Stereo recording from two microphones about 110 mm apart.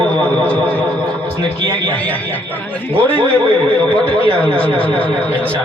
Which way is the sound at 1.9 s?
15° left (ahead or behind).